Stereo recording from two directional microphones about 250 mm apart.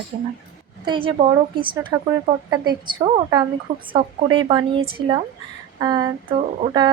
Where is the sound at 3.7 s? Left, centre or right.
Right.